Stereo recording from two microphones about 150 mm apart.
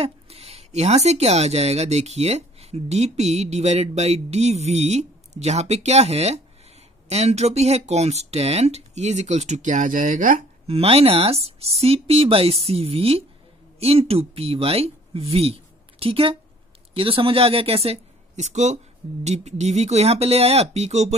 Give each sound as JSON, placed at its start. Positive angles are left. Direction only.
{"t": 0.0, "sound": "speech", "side_deg": -40}
{"t": 10.7, "sound": "speech", "side_deg": -40}